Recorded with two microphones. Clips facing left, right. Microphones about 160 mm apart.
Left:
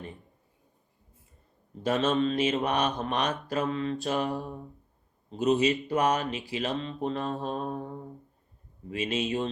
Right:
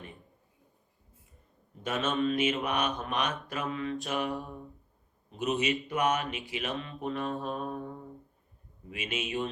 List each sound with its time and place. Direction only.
1.8 s mantra: 35° left (ahead or behind)
8.9 s mantra: 35° left (ahead or behind)